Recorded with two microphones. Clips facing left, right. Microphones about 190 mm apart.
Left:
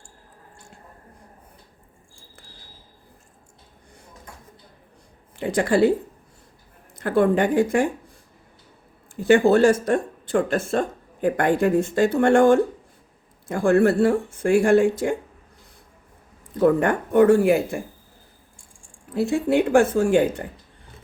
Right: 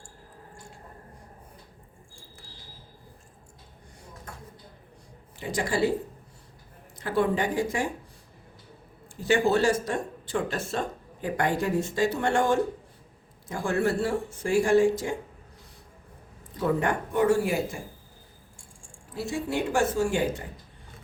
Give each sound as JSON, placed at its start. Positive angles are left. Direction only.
{"t": 5.4, "sound": "speech", "side_deg": 55}
{"t": 7.0, "sound": "speech", "side_deg": 55}
{"t": 9.2, "sound": "speech", "side_deg": 55}
{"t": 16.6, "sound": "speech", "side_deg": 55}
{"t": 19.1, "sound": "speech", "side_deg": 55}